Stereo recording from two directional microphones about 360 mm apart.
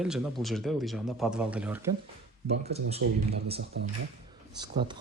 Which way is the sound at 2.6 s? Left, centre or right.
Centre.